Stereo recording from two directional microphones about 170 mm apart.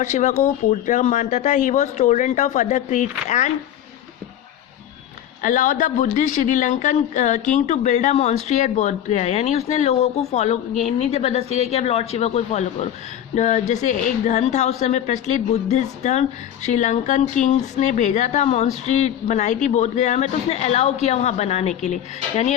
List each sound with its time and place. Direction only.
0.0 s speech: 45° left (ahead or behind)
5.4 s speech: 50° left (ahead or behind)